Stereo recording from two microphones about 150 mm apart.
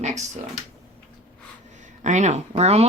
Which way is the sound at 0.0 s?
50° right (ahead or behind).